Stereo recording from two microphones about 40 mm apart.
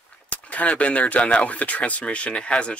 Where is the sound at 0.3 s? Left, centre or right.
Left.